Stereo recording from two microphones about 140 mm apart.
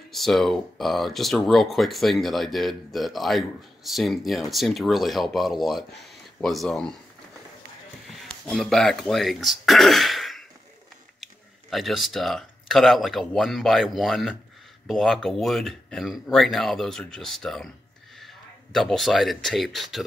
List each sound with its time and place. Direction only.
0.1 s speech: centre (ahead or behind)
8.1 s speech: centre (ahead or behind)
11.7 s speech: centre (ahead or behind)